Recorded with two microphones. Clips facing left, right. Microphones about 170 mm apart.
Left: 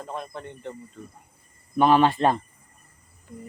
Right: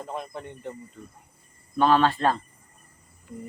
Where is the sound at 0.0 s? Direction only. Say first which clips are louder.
Even; 15° right (ahead or behind).